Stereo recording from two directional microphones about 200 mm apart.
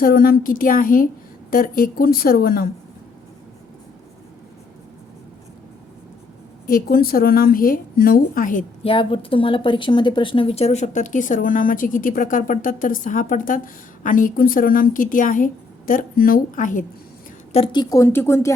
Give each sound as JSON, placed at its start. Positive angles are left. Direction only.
{"t": 0.0, "sound": "a woman's voice", "side_deg": 45}
{"t": 6.7, "sound": "a woman's voice", "side_deg": 50}
{"t": 8.8, "sound": "a woman's voice", "side_deg": 25}
{"t": 17.5, "sound": "speech", "side_deg": 25}